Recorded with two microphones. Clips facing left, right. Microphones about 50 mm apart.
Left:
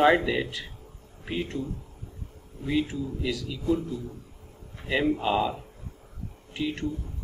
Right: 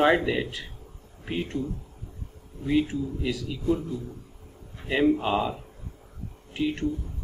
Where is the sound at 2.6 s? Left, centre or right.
Centre.